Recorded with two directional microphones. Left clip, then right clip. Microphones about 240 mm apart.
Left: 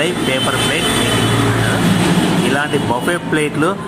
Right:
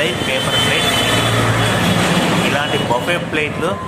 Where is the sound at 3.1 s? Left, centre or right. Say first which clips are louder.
Left 1 dB; centre.